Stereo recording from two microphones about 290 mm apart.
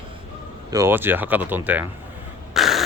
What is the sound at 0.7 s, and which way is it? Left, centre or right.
Speech, centre.